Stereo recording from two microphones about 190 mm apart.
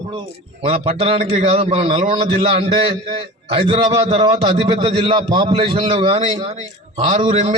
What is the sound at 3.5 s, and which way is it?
A man's voice, 30° right (ahead or behind).